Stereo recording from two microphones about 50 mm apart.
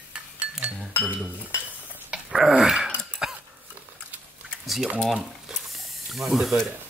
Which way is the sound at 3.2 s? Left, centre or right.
Centre.